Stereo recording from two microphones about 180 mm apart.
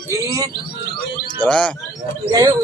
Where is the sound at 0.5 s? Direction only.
55° left (ahead or behind).